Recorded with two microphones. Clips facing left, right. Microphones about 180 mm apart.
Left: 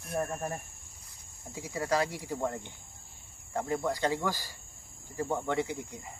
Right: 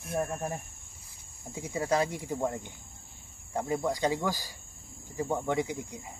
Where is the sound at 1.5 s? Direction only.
20° right (ahead or behind).